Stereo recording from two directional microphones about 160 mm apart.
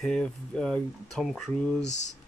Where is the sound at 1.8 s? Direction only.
45° left (ahead or behind).